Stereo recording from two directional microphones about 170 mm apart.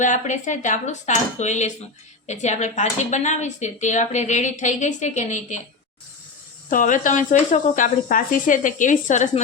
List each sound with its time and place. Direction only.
0.0 s speech: 45° left (ahead or behind)
6.7 s speech: 50° left (ahead or behind)